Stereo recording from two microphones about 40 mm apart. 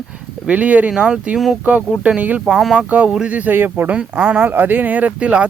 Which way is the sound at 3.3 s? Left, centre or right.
Right.